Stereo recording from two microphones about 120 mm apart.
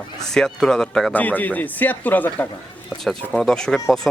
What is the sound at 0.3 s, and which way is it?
Speech, 5° left (ahead or behind).